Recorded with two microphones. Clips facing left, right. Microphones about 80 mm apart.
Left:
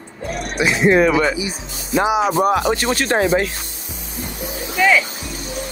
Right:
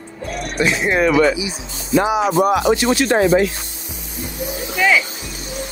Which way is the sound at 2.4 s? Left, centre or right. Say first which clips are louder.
Right 2 dB; left.